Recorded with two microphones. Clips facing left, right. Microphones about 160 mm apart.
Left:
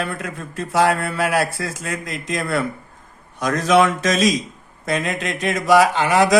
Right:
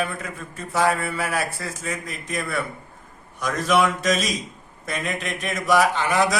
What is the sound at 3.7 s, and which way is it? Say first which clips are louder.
Speech: left 4 dB; 90° left.